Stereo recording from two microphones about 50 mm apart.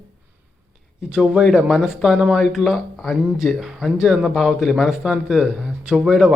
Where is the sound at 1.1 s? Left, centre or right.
Right.